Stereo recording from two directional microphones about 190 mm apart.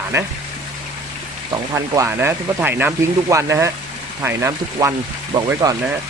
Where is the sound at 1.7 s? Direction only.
15° right (ahead or behind).